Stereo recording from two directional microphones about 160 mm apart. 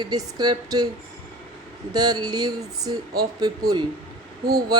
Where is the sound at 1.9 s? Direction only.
25° right (ahead or behind).